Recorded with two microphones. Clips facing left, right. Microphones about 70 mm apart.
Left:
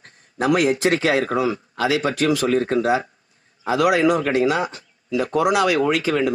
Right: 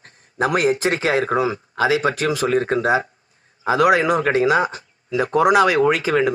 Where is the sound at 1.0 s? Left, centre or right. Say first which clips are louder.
Right 1 dB; centre.